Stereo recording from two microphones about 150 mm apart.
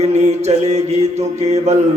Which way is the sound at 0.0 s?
45° right (ahead or behind).